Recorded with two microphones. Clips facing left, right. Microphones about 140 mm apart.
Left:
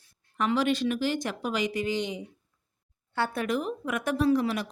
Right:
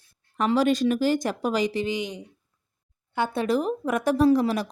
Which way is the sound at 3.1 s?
20° right (ahead or behind).